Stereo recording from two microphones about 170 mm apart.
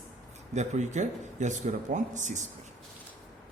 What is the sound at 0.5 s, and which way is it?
Speech, 45° right (ahead or behind).